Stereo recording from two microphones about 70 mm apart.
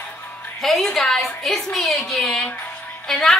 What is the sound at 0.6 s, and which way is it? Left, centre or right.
A woman's voice, centre.